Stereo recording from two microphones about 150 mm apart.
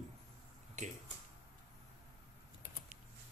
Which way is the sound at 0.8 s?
55° right (ahead or behind).